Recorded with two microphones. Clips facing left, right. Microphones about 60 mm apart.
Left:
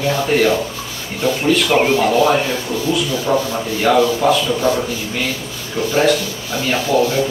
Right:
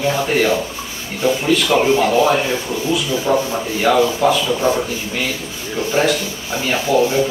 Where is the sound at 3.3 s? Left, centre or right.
Centre.